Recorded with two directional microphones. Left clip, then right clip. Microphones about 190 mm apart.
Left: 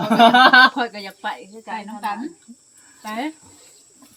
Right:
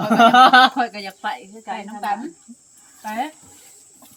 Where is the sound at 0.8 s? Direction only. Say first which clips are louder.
Right 2 dB; centre (ahead or behind).